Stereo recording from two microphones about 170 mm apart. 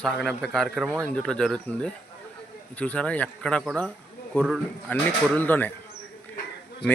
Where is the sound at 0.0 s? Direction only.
5° left (ahead or behind).